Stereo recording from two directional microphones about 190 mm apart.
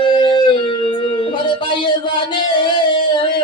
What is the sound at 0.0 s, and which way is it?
Music, 25° left (ahead or behind).